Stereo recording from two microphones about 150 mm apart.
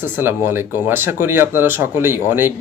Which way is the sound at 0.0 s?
15° right (ahead or behind).